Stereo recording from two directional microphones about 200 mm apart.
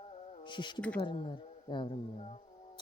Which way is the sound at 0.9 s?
25° left (ahead or behind).